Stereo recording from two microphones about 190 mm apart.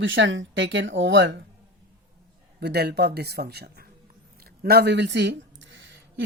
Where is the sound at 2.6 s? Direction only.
60° right (ahead or behind).